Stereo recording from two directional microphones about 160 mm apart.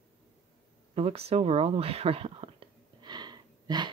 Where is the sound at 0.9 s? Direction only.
40° right (ahead or behind).